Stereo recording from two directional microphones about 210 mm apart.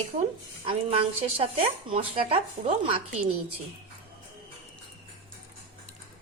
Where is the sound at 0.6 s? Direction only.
25° right (ahead or behind).